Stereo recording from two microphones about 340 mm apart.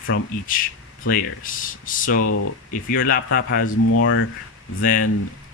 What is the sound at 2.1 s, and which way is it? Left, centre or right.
Speech, left.